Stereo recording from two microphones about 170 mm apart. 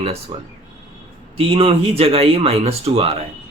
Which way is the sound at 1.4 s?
35° right (ahead or behind).